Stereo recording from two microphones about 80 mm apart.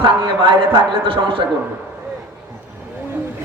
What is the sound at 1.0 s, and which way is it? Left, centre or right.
Speech, right.